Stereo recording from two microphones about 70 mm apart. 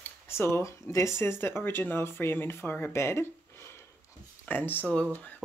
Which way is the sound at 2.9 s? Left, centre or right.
Left.